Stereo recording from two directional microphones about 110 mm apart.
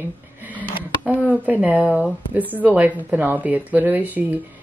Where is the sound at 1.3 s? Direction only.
15° right (ahead or behind).